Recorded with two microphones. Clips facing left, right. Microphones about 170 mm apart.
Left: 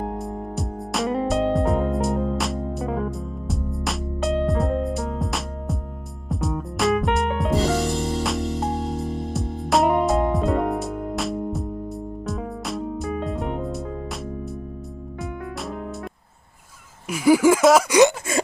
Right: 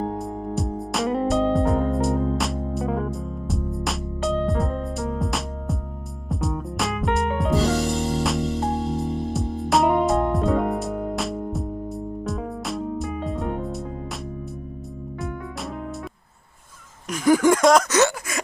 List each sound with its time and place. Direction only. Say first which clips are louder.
0.2 s music: right 2 dB; centre (ahead or behind)
17.1 s a sound: left 1 dB; 10° left (ahead or behind)
18.3 s gasp: left 6 dB; 30° left (ahead or behind)